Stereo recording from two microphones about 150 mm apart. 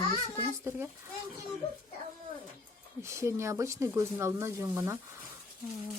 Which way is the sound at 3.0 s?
20° right (ahead or behind).